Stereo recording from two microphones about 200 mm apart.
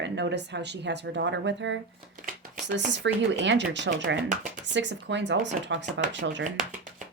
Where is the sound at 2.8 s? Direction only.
65° right (ahead or behind).